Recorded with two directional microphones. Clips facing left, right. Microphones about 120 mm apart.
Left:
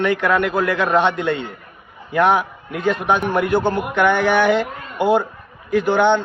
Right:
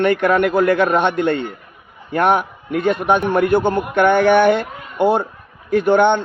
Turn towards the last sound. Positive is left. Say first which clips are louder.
# right 3 dB
turn(degrees=-55)  # may be behind; listen again after turning